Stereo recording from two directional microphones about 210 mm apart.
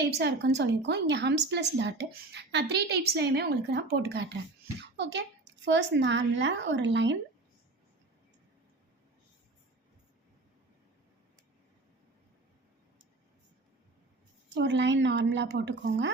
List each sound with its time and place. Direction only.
0.0 s a woman's voice: 55° right (ahead or behind)
14.5 s speech: 55° right (ahead or behind)